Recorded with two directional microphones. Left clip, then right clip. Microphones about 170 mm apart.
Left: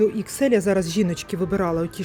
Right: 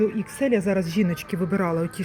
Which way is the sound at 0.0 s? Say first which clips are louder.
Left 3 dB; 25° left (ahead or behind).